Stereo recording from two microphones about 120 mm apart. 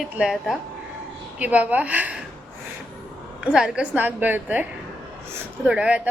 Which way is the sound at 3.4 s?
5° right (ahead or behind).